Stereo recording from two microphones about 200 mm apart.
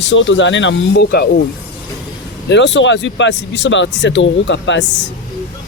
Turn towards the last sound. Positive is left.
turn(degrees=65)  # may be behind; listen again after turning